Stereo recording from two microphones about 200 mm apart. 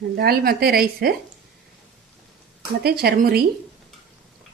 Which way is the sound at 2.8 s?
50° right (ahead or behind).